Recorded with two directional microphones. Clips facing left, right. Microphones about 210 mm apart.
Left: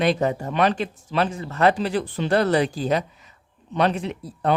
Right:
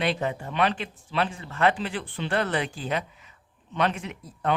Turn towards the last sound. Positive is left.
turn(degrees=35)  # may be behind; listen again after turning